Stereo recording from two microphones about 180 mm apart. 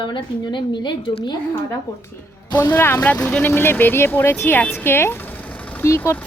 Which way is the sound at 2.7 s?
10° left (ahead or behind).